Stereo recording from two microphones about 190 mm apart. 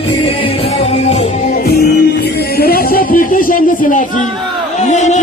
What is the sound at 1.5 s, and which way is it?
Music, 55° left (ahead or behind).